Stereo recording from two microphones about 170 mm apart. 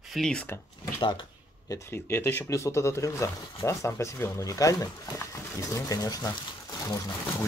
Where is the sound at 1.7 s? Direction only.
15° left (ahead or behind).